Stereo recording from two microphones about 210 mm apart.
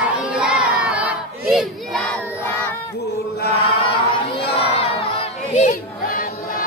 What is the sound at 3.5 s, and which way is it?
Crowd, 25° left (ahead or behind).